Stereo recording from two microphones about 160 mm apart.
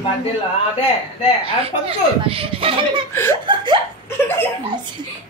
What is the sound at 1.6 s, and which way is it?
Speech, 35° right (ahead or behind).